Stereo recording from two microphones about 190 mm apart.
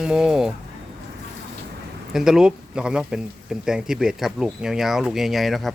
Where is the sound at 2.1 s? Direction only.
Centre (ahead or behind).